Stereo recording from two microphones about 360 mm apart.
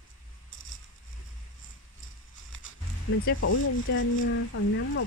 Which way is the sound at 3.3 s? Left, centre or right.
Left.